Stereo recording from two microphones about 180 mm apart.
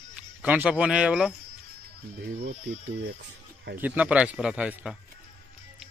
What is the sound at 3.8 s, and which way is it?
Speech, 10° right (ahead or behind).